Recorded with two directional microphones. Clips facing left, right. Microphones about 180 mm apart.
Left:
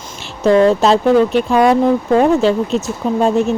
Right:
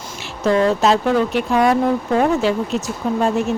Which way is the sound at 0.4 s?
30° left (ahead or behind).